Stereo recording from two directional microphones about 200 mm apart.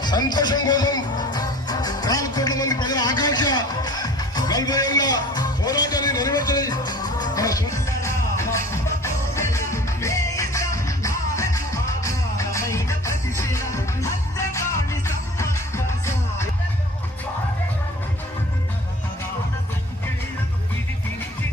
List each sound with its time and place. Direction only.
0.0 s music: 20° left (ahead or behind)